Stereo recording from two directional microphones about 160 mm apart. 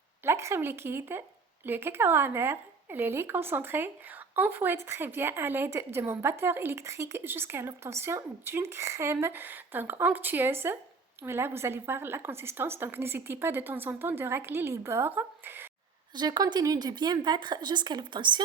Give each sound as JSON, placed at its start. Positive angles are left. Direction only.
{"t": 0.3, "sound": "a woman's voice", "side_deg": -15}
{"t": 16.1, "sound": "speech", "side_deg": -25}